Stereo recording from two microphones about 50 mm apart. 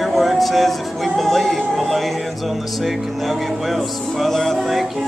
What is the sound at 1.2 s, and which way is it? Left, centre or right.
Music, centre.